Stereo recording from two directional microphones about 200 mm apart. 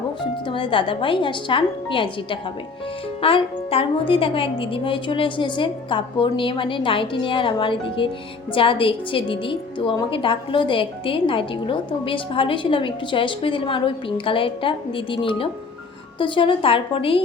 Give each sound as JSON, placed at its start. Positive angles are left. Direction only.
{"t": 0.2, "sound": "a woman's voice", "side_deg": 25}